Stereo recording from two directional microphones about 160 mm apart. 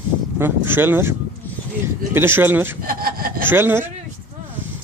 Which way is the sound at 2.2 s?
15° right (ahead or behind).